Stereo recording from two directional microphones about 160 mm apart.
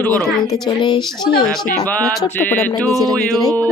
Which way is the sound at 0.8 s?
30° left (ahead or behind).